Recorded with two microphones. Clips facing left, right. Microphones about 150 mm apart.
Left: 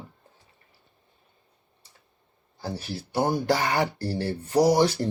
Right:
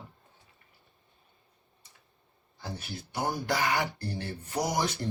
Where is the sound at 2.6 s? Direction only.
35° left (ahead or behind).